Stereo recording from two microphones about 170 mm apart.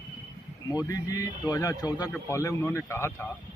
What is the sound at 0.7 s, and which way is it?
A man's voice, 20° left (ahead or behind).